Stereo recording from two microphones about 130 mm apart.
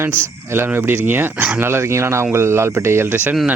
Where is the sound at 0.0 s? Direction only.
20° right (ahead or behind).